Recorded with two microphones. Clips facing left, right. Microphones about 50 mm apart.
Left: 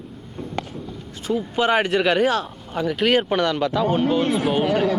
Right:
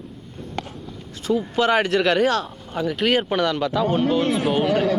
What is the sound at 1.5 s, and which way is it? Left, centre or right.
Speech, centre.